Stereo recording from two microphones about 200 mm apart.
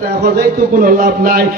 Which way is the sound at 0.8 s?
45° right (ahead or behind).